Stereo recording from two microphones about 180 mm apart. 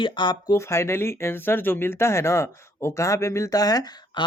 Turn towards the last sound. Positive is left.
turn(degrees=25)  # may be behind; listen again after turning